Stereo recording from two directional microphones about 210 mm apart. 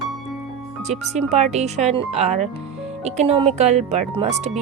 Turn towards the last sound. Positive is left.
turn(degrees=-30)  # may be behind; listen again after turning